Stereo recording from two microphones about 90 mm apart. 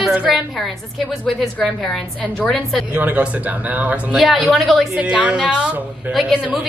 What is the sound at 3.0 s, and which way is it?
Speech, 15° right (ahead or behind).